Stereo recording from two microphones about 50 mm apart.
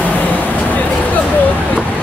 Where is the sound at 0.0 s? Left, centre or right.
Left.